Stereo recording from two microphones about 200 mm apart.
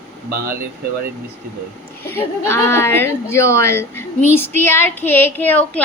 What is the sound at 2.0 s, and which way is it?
A woman's voice, 10° left (ahead or behind).